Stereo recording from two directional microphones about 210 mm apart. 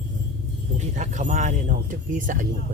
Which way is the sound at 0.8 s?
35° right (ahead or behind).